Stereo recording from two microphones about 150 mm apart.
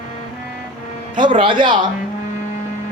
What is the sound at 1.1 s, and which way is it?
Speech, 30° right (ahead or behind).